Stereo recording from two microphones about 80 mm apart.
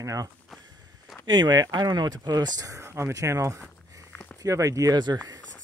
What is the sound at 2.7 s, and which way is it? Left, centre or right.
Speech, right.